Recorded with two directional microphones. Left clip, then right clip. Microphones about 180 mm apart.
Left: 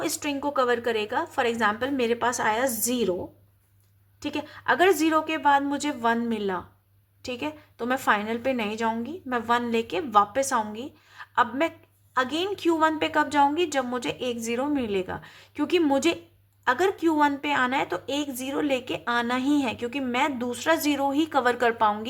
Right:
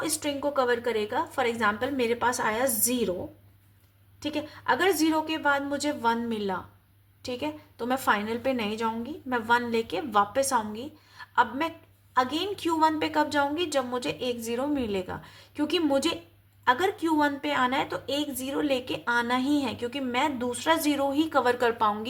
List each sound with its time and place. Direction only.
0.0 s a woman's voice: 25° left (ahead or behind)
4.2 s a woman's voice: 25° left (ahead or behind)